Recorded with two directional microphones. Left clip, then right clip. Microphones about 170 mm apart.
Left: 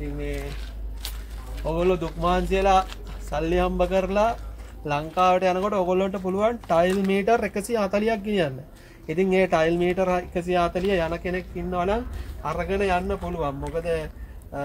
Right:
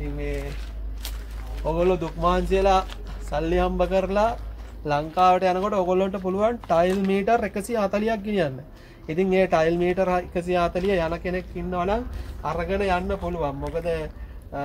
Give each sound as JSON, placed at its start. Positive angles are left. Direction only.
{"t": 1.6, "sound": "speech", "side_deg": 0}